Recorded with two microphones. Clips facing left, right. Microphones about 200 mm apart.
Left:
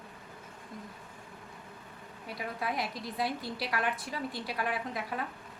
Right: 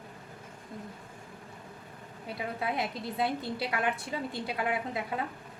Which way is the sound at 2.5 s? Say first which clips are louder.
Right 2 dB; 25° right (ahead or behind).